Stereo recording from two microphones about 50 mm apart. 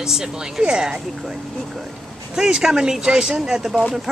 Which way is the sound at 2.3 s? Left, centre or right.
Centre.